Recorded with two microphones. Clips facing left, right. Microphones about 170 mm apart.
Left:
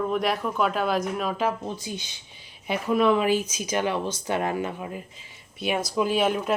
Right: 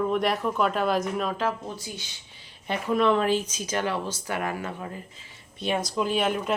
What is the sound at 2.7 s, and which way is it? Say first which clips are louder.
Speech: left 1 dB; 5° left (ahead or behind).